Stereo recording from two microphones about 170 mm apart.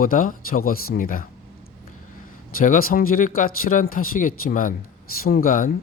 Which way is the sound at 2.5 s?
55° left (ahead or behind).